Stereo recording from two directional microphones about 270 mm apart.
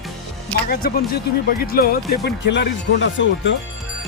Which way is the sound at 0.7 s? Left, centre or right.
Left.